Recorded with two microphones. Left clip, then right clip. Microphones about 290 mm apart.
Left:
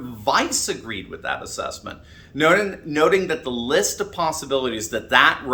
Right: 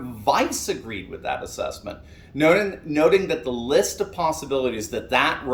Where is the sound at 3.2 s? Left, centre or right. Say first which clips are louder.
Left 1 dB; centre.